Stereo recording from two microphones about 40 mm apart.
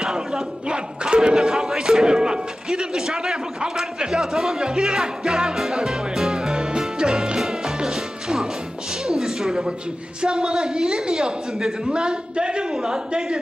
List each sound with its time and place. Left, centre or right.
0.0 s speech: centre
6.1 s music: centre
9.0 s a sound: centre
10.2 s speech: centre
11.9 s a man's voice: right